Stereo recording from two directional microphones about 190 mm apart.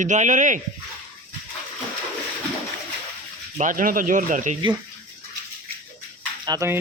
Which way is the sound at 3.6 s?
45° right (ahead or behind).